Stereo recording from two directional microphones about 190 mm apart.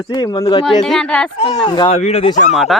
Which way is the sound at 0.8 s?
5° left (ahead or behind).